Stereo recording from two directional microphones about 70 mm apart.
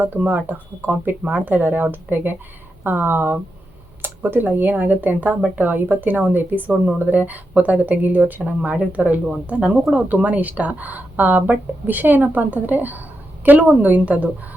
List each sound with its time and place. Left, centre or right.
0.0 s speech: right